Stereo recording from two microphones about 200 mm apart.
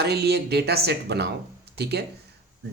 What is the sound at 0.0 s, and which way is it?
Speech, 55° right (ahead or behind).